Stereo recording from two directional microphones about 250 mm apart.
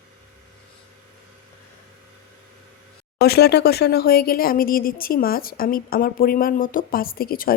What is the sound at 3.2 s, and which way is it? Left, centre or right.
Speech, left.